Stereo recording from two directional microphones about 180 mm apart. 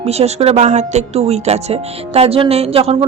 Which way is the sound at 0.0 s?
35° right (ahead or behind).